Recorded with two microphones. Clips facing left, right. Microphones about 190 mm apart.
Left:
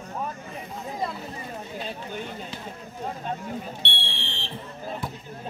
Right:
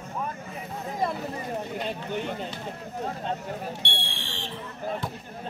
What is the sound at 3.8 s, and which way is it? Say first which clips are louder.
Fire alarm: even; 45° right (ahead or behind).